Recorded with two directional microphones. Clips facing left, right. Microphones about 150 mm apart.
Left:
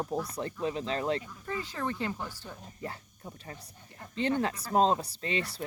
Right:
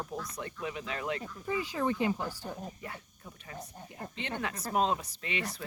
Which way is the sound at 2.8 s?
35° left (ahead or behind).